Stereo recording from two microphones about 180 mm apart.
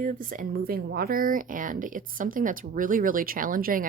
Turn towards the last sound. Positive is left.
turn(degrees=-50)  # may be behind; listen again after turning